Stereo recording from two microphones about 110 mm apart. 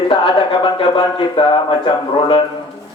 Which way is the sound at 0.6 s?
50° left (ahead or behind).